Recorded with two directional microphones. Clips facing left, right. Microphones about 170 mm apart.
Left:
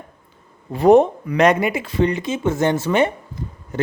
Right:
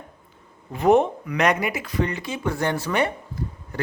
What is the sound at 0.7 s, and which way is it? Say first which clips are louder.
Speech: left 5 dB; 35° left (ahead or behind).